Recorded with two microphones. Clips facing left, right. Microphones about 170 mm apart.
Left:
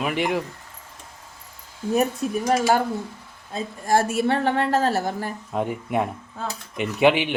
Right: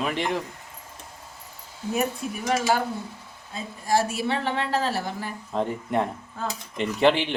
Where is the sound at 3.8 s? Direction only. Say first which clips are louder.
Left 3 dB; 50° left (ahead or behind).